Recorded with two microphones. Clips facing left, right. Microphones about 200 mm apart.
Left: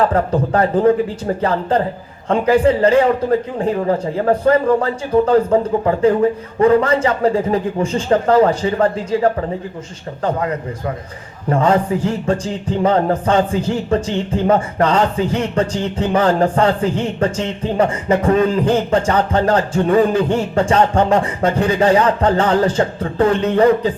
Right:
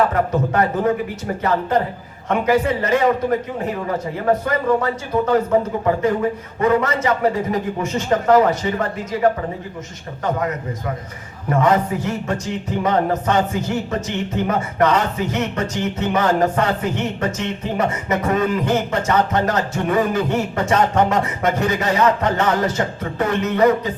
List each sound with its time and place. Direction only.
0.0 s speech: 30° left (ahead or behind)
6.6 s speech: 30° left (ahead or behind)